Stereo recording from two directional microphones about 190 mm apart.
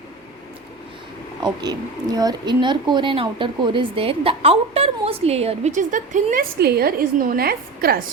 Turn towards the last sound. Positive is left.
turn(degrees=-55)  # may be behind; listen again after turning